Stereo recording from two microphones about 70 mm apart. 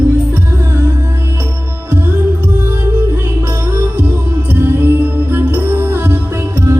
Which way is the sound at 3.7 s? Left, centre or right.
Right.